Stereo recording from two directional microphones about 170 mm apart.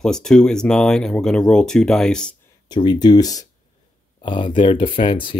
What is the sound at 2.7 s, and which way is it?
Speech, 25° left (ahead or behind).